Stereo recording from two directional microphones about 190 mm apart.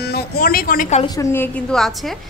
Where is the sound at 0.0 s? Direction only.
55° left (ahead or behind).